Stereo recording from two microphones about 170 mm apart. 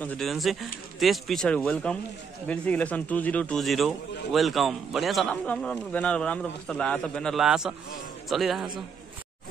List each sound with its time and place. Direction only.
0.0 s a man's voice: 5° left (ahead or behind)